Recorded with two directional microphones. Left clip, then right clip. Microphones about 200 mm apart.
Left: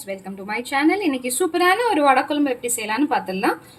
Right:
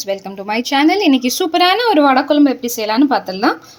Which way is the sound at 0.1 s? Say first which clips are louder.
Right 7 dB; 40° right (ahead or behind).